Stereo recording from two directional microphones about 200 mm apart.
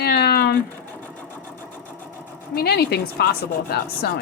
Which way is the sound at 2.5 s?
50° left (ahead or behind).